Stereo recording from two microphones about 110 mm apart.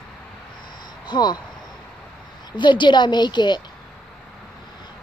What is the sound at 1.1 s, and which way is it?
Speech, 40° left (ahead or behind).